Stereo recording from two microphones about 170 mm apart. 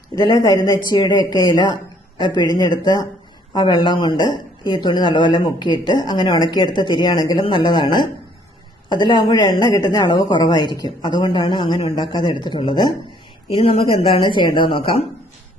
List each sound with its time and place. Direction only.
0.2 s speech: 25° left (ahead or behind)